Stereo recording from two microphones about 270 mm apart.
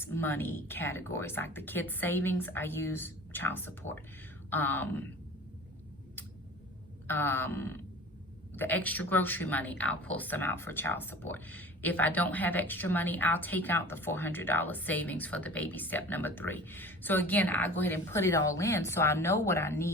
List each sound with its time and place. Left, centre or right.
0.0 s speech: centre
7.1 s speech: centre